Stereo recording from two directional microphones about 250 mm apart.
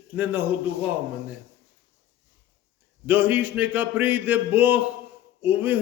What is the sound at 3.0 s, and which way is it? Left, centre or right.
A man's voice, centre.